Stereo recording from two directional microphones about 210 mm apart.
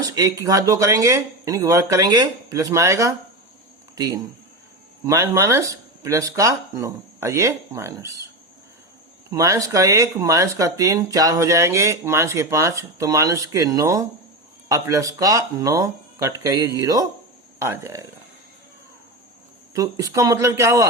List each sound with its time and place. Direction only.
0.0 s speech: 15° right (ahead or behind)
9.3 s speech: 15° right (ahead or behind)
19.7 s speech: 15° right (ahead or behind)